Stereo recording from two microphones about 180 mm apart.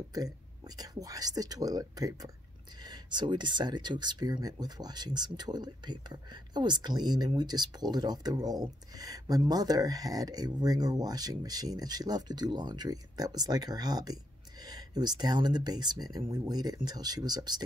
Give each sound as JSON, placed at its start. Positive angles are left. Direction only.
{"t": 0.7, "sound": "speech", "side_deg": -20}